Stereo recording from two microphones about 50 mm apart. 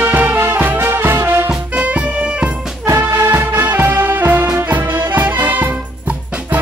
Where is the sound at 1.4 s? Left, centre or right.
Right.